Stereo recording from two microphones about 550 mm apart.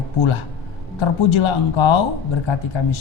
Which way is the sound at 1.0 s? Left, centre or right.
Left.